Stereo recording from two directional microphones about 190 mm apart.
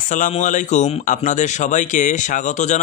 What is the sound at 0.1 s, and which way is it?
Speech, 40° left (ahead or behind).